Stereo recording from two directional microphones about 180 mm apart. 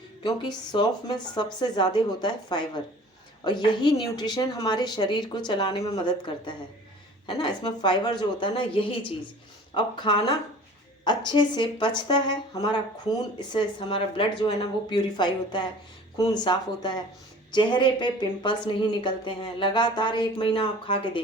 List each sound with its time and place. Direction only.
0.2 s a woman's voice: 25° left (ahead or behind)